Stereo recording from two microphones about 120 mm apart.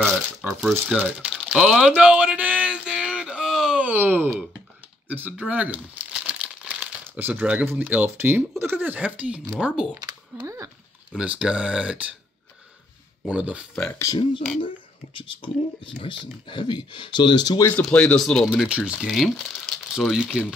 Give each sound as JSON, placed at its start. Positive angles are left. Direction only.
{"t": 0.4, "sound": "typing", "side_deg": -5}
{"t": 3.9, "sound": "speech", "side_deg": -15}
{"t": 5.0, "sound": "crumpling", "side_deg": -15}
{"t": 7.1, "sound": "speech", "side_deg": -15}
{"t": 9.9, "sound": "speech", "side_deg": -30}
{"t": 11.1, "sound": "speech", "side_deg": -10}
{"t": 13.3, "sound": "speech", "side_deg": -10}
{"t": 13.9, "sound": "speech", "side_deg": 30}
{"t": 15.1, "sound": "speech", "side_deg": 45}
{"t": 17.7, "sound": "speech", "side_deg": 10}
{"t": 18.5, "sound": "speech", "side_deg": -10}